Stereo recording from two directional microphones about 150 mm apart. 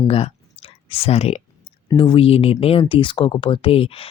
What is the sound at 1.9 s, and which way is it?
Speech, 35° left (ahead or behind).